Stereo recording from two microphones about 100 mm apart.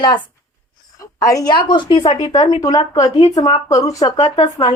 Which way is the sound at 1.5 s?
50° left (ahead or behind).